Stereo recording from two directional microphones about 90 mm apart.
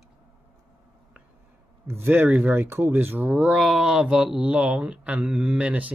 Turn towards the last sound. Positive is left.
turn(degrees=-15)  # may be behind; listen again after turning